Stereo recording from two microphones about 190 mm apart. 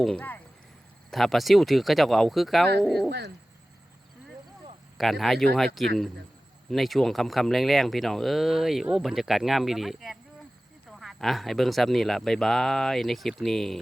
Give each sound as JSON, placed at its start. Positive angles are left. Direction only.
{"t": 0.0, "sound": "speech", "side_deg": 5}
{"t": 3.1, "sound": "bird", "side_deg": -65}
{"t": 4.9, "sound": "speech", "side_deg": 0}